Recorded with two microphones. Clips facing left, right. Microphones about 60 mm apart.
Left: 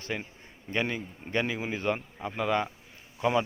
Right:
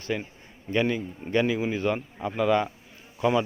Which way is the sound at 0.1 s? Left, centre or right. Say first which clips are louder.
Right 5 dB; left.